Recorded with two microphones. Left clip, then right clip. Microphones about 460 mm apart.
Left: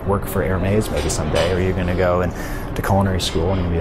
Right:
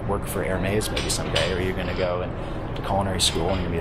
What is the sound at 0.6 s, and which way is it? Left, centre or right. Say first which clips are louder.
Speech: left 5 dB; left.